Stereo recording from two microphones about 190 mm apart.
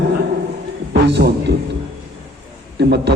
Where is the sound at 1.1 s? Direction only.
65° right (ahead or behind).